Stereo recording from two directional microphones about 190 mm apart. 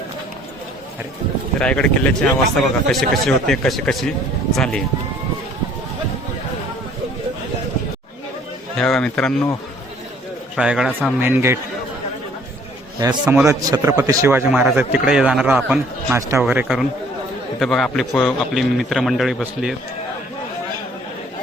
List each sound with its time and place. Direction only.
1.5 s a man's voice: 5° left (ahead or behind)
8.8 s a man's voice: 5° left (ahead or behind)
10.5 s a man's voice: 5° right (ahead or behind)
13.2 s a man's voice: 10° right (ahead or behind)